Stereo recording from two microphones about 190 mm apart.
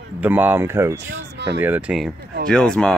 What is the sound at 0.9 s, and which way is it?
Speech, 65° right (ahead or behind).